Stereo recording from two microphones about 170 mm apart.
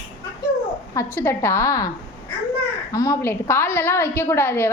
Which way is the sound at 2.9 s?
20° left (ahead or behind).